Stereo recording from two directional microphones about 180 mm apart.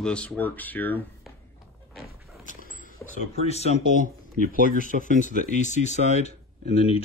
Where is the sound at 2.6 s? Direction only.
50° left (ahead or behind).